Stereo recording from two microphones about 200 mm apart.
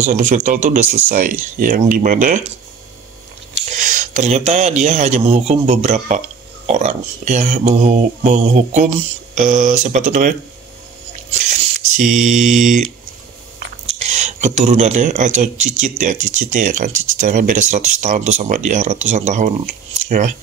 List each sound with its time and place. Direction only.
0.0 s speech: 40° right (ahead or behind)
3.7 s speech: 40° right (ahead or behind)
12.3 s mantra: centre (ahead or behind)
13.9 s speech: 35° right (ahead or behind)